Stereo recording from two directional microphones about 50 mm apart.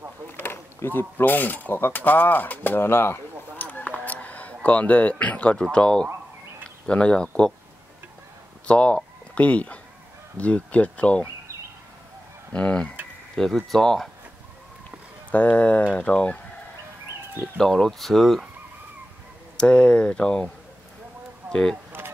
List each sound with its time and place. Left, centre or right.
0.4 s speech: left
3.5 s honk: left
4.6 s speech: left
5.6 s speech: centre
8.6 s speech: left
12.5 s speech: left
13.4 s speech: centre
15.3 s speech: left
17.4 s speech: centre
19.5 s speech: centre